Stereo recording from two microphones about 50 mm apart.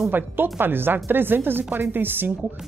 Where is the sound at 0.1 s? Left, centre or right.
Right.